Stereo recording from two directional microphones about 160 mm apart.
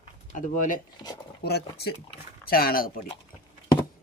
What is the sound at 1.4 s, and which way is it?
Speech, 85° left.